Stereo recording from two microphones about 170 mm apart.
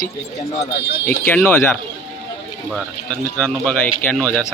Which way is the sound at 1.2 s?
10° left (ahead or behind).